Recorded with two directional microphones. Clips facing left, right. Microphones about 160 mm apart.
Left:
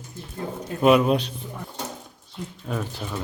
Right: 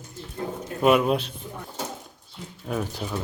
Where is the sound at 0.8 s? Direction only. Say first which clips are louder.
Left 2 dB; centre (ahead or behind).